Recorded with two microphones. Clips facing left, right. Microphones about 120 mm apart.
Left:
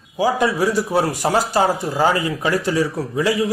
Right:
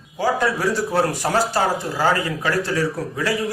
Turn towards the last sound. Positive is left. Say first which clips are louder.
# left 3 dB
turn(degrees=15)  # may be behind; listen again after turning